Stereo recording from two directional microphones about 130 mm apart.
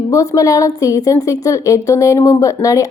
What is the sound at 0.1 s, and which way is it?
A woman's voice, 25° left (ahead or behind).